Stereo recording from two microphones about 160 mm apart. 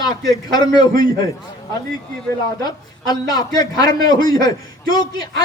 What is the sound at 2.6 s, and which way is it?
Speech, 25° left (ahead or behind).